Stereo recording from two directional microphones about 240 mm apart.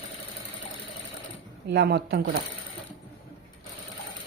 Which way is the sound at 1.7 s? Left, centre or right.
Right.